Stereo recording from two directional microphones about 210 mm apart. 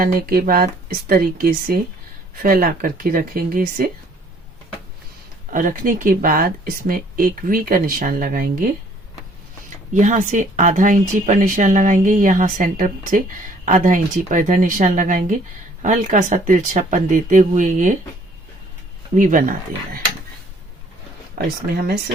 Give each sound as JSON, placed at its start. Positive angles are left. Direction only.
{"t": 0.0, "sound": "speech", "side_deg": -45}
{"t": 5.5, "sound": "speech", "side_deg": -40}
{"t": 9.9, "sound": "speech", "side_deg": -35}
{"t": 19.1, "sound": "speech", "side_deg": -40}
{"t": 21.3, "sound": "speech", "side_deg": -50}